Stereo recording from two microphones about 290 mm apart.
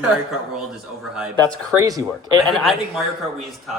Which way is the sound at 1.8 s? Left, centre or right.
Centre.